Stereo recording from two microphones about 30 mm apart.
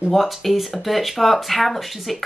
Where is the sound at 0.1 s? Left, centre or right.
Centre.